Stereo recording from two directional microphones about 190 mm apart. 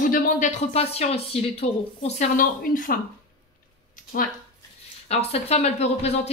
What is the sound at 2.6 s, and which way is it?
Speech, 45° left (ahead or behind).